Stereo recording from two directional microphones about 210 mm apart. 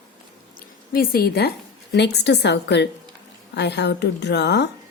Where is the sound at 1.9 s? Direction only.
55° left (ahead or behind).